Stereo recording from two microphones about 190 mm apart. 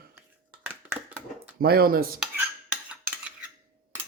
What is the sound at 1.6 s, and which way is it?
Speech, 55° right (ahead or behind).